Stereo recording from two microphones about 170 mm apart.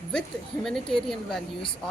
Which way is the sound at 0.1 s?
5° left (ahead or behind).